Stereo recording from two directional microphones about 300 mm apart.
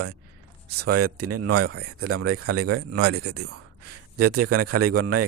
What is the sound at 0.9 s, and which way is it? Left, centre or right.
Speech, right.